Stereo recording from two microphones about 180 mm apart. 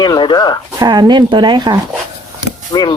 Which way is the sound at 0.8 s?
25° right (ahead or behind).